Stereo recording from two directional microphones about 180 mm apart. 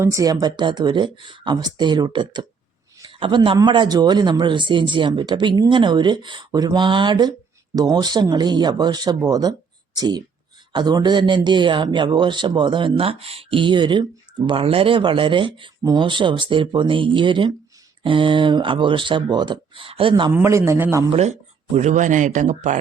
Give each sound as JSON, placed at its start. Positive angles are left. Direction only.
{"t": 0.0, "sound": "speech", "side_deg": -15}
{"t": 20.3, "sound": "a man's voice", "side_deg": -15}
{"t": 21.1, "sound": "speech", "side_deg": -35}